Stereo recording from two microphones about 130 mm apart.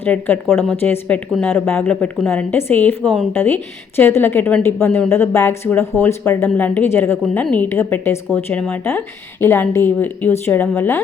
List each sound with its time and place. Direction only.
0.0 s speech: 15° left (ahead or behind)
3.0 s speech: centre (ahead or behind)
3.3 s speech: 15° left (ahead or behind)